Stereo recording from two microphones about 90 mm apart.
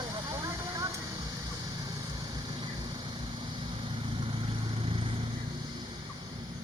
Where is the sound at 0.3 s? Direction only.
40° right (ahead or behind).